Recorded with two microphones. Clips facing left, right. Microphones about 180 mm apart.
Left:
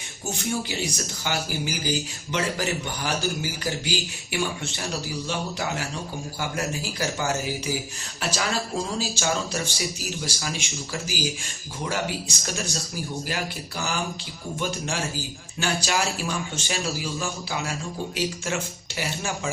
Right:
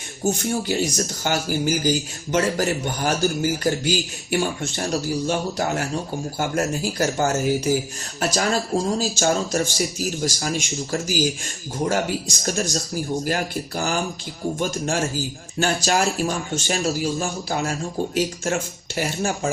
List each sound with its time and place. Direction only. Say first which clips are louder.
0.3 s speech: right 6 dB; 45° right (ahead or behind)
12.4 s speech: right 6 dB; 45° right (ahead or behind)
15.5 s speech: right 5 dB; 45° right (ahead or behind)